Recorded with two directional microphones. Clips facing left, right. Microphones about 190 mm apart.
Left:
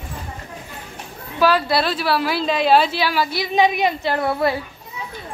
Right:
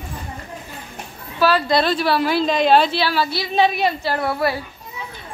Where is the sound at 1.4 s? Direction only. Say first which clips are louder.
Even; 10° left (ahead or behind).